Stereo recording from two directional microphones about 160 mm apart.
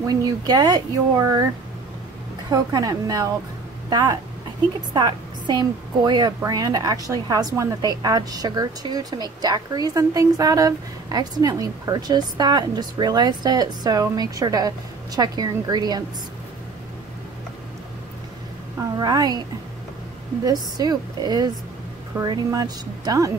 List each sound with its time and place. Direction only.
0.0 s a woman's voice: 25° right (ahead or behind)
2.5 s a woman's voice: 25° right (ahead or behind)
18.9 s a woman's voice: 25° right (ahead or behind)
20.4 s a woman's voice: 25° right (ahead or behind)